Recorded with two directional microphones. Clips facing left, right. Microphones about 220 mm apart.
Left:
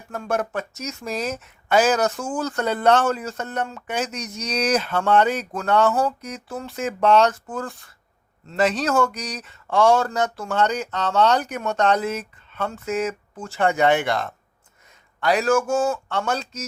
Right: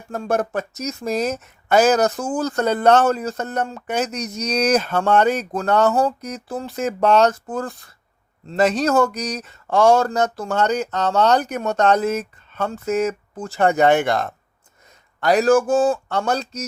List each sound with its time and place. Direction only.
0.1 s speech: 35° right (ahead or behind)